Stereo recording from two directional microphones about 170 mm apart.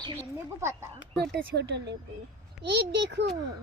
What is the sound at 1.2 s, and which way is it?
A child's voice, 85° right.